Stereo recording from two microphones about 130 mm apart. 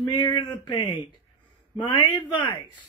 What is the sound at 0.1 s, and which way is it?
Speech, 35° left (ahead or behind).